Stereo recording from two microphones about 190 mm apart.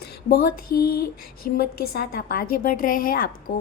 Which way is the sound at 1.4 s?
50° left (ahead or behind).